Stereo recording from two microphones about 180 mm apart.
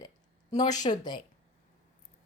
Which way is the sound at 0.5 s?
20° left (ahead or behind).